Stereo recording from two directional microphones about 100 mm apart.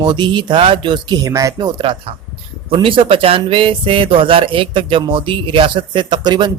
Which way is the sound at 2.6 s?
60° right (ahead or behind).